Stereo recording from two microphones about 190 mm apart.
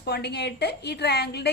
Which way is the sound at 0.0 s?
60° left (ahead or behind).